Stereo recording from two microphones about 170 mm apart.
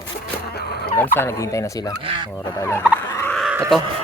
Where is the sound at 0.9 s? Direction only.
10° left (ahead or behind).